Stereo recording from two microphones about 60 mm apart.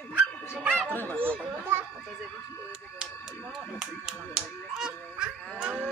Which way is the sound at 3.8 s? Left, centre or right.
Centre.